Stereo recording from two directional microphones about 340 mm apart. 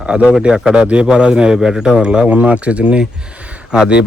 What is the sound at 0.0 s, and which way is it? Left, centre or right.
A man's voice, centre.